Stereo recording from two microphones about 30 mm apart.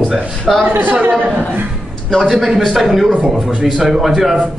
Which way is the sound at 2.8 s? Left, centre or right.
Centre.